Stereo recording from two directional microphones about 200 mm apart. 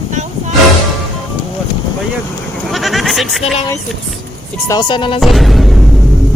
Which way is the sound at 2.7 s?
Centre (ahead or behind).